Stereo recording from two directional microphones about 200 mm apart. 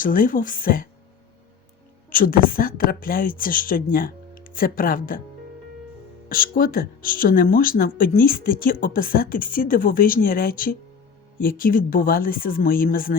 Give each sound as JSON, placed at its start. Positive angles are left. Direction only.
{"t": 0.0, "sound": "speech", "side_deg": 45}
{"t": 2.0, "sound": "speech", "side_deg": 45}
{"t": 6.2, "sound": "speech", "side_deg": 45}